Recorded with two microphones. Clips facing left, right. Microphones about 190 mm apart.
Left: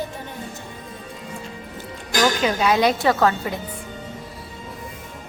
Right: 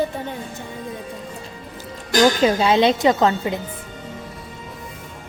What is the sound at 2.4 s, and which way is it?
A woman's voice, 25° right (ahead or behind).